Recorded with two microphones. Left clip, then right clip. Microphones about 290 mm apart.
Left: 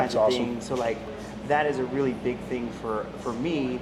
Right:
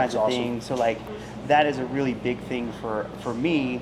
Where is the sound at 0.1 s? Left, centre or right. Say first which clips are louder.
Left 1 dB; left.